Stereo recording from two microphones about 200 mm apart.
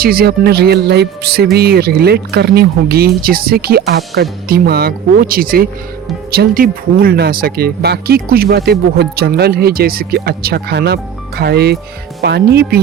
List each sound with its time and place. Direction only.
0.0 s speech: 50° right (ahead or behind)